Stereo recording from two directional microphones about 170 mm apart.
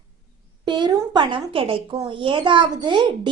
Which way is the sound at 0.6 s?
25° right (ahead or behind).